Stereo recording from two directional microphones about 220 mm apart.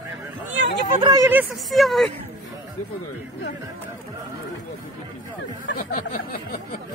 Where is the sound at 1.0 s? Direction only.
15° right (ahead or behind).